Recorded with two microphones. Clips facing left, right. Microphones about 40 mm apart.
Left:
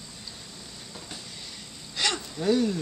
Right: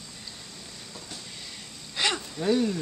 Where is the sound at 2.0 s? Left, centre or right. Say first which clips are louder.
Right 1 dB; right.